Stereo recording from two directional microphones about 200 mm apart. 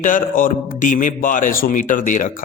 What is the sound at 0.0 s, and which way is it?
A man's voice, 40° left (ahead or behind).